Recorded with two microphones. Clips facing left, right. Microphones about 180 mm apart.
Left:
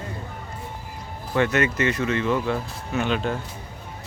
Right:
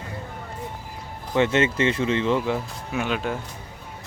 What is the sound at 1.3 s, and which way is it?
Speech, 25° right (ahead or behind).